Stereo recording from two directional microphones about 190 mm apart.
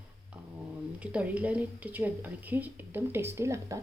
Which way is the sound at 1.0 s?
5° right (ahead or behind).